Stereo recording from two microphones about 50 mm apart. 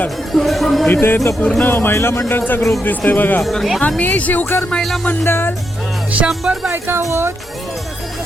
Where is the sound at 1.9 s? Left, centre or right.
Left.